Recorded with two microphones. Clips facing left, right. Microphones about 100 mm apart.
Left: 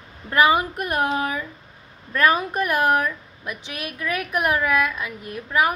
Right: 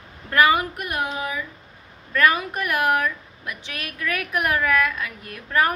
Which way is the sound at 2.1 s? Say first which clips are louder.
Left 1 dB; 25° left (ahead or behind).